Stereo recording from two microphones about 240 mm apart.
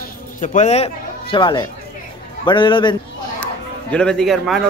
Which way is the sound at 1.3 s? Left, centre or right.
Centre.